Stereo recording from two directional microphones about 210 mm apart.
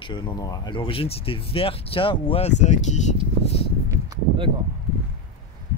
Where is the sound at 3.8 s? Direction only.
20° right (ahead or behind).